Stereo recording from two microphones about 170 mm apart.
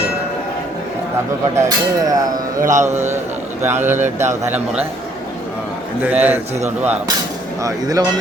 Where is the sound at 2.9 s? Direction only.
40° right (ahead or behind).